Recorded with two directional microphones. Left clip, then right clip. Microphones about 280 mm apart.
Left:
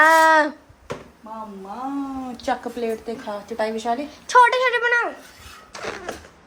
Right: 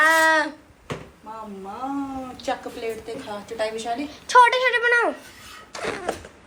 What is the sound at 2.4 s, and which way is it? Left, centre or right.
A woman's voice, left.